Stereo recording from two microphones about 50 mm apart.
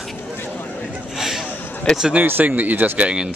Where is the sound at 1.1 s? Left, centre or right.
Centre.